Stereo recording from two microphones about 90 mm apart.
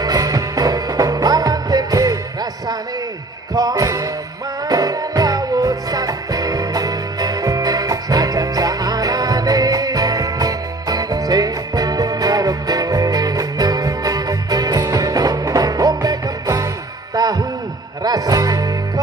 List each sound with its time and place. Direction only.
0.0 s music: 50° right (ahead or behind)
3.5 s music: 45° right (ahead or behind)